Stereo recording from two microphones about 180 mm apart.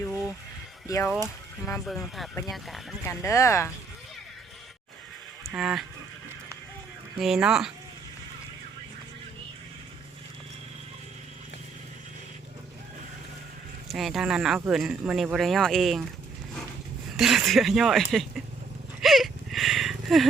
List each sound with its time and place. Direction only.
0.1 s a sound: 10° right (ahead or behind)
0.9 s speech: 15° left (ahead or behind)
1.8 s speech: centre (ahead or behind)
3.1 s speech: 15° left (ahead or behind)
5.5 s speech: 5° right (ahead or behind)
7.2 s speech: 5° right (ahead or behind)
13.8 s speech: centre (ahead or behind)
17.2 s speech: centre (ahead or behind)
18.9 s a sound: centre (ahead or behind)